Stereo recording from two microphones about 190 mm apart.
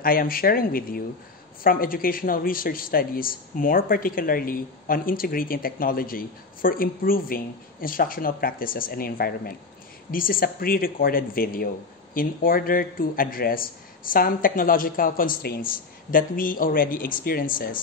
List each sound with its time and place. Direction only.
0.0 s speech: 50° left (ahead or behind)